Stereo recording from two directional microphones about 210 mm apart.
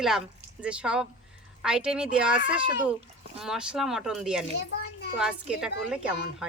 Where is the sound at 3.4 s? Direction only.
5° right (ahead or behind).